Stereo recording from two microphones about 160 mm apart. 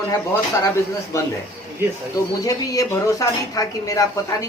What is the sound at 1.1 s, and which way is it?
Speech, 20° left (ahead or behind).